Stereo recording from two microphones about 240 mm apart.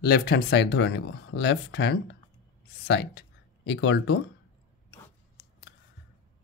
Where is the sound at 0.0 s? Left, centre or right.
Left.